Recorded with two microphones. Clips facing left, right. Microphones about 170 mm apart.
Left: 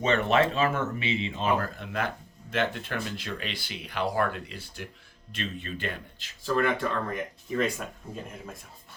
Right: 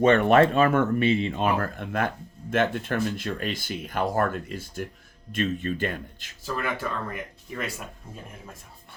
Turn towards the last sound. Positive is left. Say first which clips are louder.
# left 6 dB
turn(degrees=-5)  # may be behind; listen again after turning